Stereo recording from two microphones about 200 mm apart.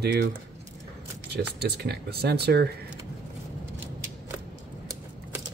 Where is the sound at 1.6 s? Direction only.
55° right (ahead or behind).